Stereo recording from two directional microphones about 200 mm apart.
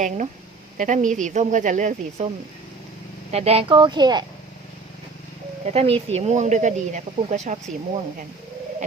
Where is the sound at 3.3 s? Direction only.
30° right (ahead or behind).